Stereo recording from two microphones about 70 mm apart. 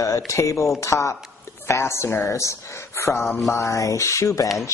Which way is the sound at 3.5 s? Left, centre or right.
Left.